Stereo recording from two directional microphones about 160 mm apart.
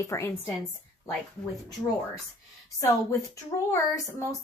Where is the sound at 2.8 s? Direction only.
20° left (ahead or behind).